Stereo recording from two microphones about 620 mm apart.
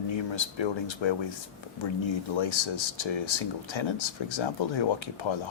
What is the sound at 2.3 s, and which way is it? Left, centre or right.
Speech, left.